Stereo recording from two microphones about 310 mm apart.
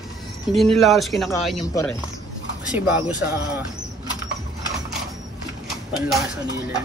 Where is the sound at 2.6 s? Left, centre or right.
Centre.